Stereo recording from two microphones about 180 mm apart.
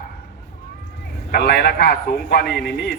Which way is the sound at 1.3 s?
65° left (ahead or behind).